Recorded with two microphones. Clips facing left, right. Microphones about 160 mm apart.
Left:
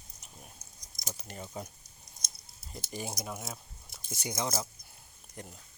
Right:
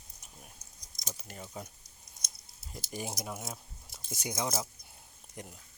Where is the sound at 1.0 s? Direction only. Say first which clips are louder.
Left 2 dB; centre (ahead or behind).